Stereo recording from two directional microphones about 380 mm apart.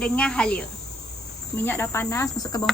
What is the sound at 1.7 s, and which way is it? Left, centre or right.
Speech, centre.